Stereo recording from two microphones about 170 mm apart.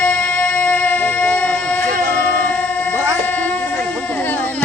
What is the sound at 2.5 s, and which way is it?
Music, 10° left (ahead or behind).